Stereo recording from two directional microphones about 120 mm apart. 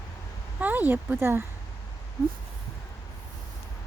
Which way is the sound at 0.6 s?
15° right (ahead or behind).